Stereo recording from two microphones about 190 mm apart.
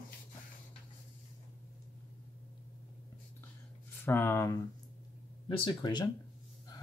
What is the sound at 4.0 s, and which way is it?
Speech, 10° left (ahead or behind).